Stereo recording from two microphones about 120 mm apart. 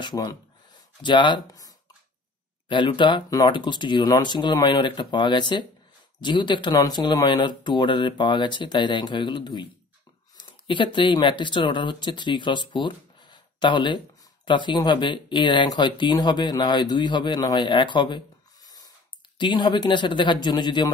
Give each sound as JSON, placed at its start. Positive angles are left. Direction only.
{"t": 0.0, "sound": "speech", "side_deg": 35}
{"t": 2.7, "sound": "speech", "side_deg": 40}